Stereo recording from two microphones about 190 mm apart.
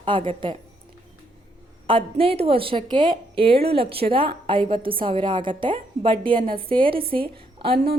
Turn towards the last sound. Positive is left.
turn(degrees=-30)  # may be behind; listen again after turning